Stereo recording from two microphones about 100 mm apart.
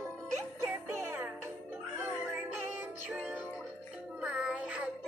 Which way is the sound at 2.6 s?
20° right (ahead or behind).